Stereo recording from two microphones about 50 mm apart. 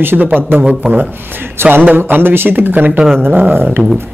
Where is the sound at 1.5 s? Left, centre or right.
Right.